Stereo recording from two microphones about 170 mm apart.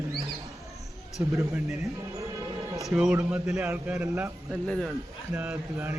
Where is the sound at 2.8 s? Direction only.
5° right (ahead or behind).